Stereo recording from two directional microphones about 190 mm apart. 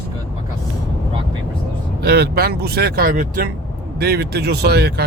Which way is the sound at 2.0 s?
60° right (ahead or behind).